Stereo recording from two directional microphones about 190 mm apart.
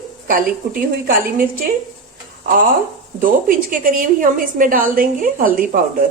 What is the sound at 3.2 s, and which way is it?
A woman's voice, 45° right (ahead or behind).